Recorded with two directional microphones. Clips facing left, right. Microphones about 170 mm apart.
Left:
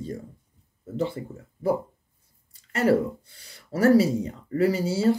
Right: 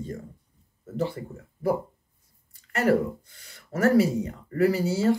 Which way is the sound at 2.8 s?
30° left (ahead or behind).